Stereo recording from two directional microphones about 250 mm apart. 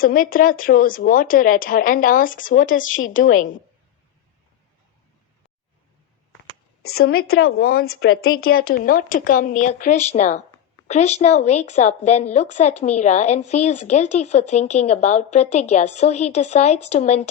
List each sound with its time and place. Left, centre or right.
0.0 s speech: left
7.0 s speech: left
8.4 s speech: left